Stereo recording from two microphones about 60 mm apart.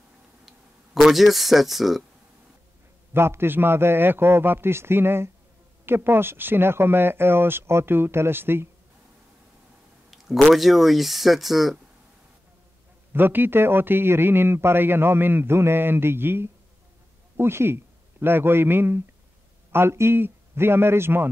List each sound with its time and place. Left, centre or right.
0.5 s speech: centre
3.1 s a man's voice: right
10.1 s speech: centre
13.1 s a man's voice: right